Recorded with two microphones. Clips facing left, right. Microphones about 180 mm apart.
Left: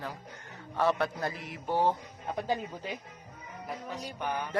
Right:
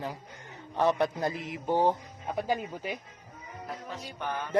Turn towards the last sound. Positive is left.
turn(degrees=15)  # may be behind; listen again after turning